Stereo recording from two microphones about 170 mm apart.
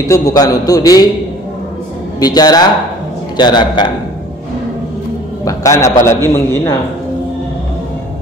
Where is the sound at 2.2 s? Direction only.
25° left (ahead or behind).